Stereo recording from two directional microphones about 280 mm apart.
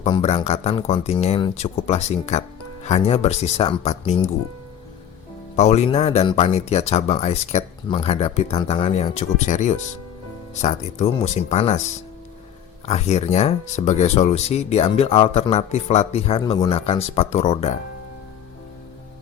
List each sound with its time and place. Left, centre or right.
0.0 s speech: left
5.5 s speech: left
12.8 s speech: left